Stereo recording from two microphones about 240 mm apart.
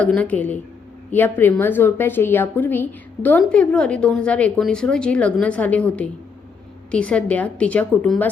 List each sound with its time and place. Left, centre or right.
0.0 s a woman's voice: centre